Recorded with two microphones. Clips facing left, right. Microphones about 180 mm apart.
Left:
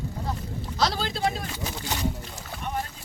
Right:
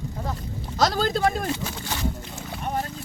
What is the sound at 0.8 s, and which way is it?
Speech, 45° right (ahead or behind).